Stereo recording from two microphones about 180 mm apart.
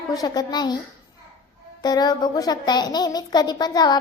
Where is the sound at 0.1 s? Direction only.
20° left (ahead or behind).